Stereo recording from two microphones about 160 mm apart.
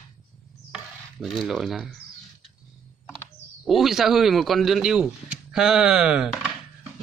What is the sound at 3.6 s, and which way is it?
Speech, centre (ahead or behind).